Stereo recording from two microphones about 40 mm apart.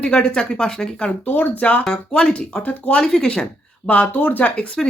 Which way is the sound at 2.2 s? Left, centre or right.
Left.